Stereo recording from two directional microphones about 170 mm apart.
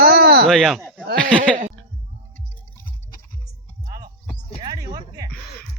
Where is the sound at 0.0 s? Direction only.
65° right (ahead or behind).